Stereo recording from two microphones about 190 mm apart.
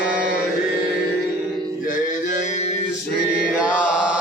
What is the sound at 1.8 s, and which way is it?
Music, 45° left (ahead or behind).